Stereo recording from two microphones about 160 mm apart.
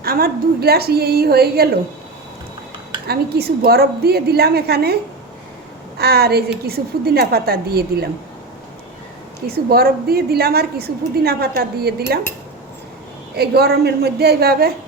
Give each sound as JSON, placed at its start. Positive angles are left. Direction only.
{"t": 0.0, "sound": "a woman's voice", "side_deg": -70}
{"t": 3.1, "sound": "a woman's voice", "side_deg": -75}
{"t": 6.0, "sound": "a woman's voice", "side_deg": -75}
{"t": 9.5, "sound": "a woman's voice", "side_deg": -75}
{"t": 13.3, "sound": "a woman's voice", "side_deg": -80}